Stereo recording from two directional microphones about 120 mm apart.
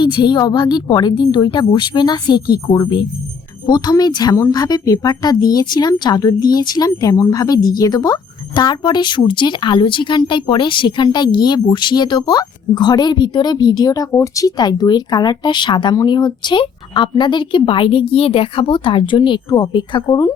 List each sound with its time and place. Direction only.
0.0 s a woman's voice: 40° left (ahead or behind)